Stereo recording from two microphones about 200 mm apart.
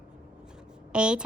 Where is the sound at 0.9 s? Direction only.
5° right (ahead or behind).